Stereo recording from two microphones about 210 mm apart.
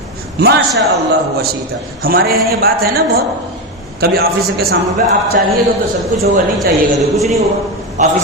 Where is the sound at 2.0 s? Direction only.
45° right (ahead or behind).